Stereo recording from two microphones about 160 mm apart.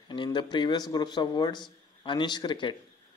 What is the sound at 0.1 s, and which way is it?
A man's voice, 30° left (ahead or behind).